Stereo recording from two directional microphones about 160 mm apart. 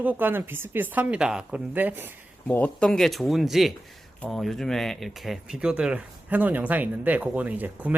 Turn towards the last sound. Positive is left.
turn(degrees=-10)  # may be behind; listen again after turning